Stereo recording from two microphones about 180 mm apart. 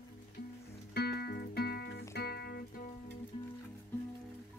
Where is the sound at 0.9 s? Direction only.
60° left (ahead or behind).